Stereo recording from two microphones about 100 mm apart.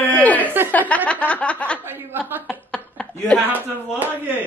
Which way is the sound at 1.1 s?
15° left (ahead or behind).